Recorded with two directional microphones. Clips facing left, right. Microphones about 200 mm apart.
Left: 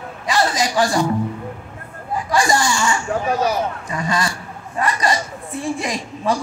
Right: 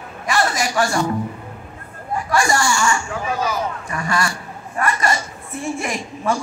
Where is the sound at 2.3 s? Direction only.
20° left (ahead or behind).